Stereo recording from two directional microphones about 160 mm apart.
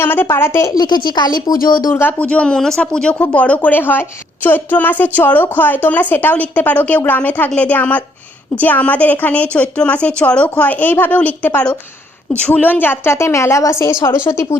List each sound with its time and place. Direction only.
0.0 s a woman's voice: 15° left (ahead or behind)
1.5 s speech: 60° left (ahead or behind)
1.8 s a woman's voice: 15° left (ahead or behind)